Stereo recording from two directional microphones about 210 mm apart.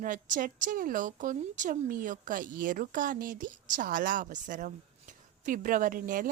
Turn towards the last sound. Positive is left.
turn(degrees=-40)  # may be behind; listen again after turning